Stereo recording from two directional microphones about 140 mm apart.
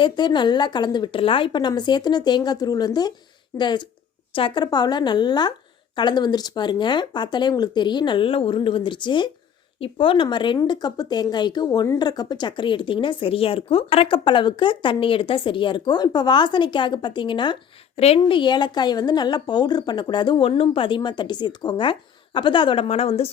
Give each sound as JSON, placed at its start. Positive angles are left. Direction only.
{"t": 0.0, "sound": "speech", "side_deg": 35}
{"t": 17.9, "sound": "speech", "side_deg": 45}